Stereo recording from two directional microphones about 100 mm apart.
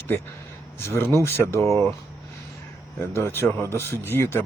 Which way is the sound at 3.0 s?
25° left (ahead or behind).